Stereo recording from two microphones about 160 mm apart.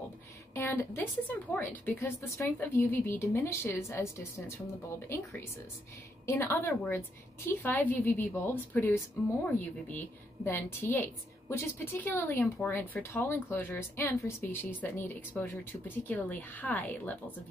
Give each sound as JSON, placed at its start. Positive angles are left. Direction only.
{"t": 0.6, "sound": "speech", "side_deg": 15}